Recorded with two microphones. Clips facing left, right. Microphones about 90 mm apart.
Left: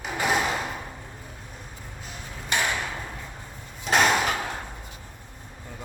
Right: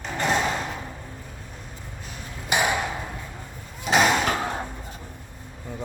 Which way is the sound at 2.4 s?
15° right (ahead or behind).